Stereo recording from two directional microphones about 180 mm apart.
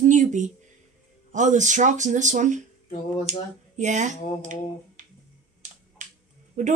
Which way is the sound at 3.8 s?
40° right (ahead or behind).